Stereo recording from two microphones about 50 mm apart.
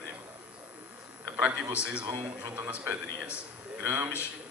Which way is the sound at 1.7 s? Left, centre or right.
Right.